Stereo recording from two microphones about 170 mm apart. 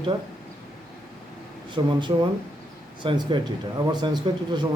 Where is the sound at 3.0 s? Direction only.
30° right (ahead or behind).